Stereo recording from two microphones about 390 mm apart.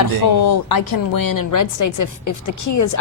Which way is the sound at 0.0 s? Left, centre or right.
Left.